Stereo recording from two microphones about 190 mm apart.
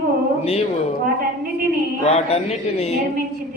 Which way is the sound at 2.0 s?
35° left (ahead or behind).